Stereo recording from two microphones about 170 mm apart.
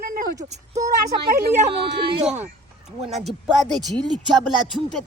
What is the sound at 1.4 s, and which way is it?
Speech, 70° right (ahead or behind).